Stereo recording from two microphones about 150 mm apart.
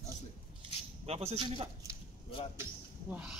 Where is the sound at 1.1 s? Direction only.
40° right (ahead or behind).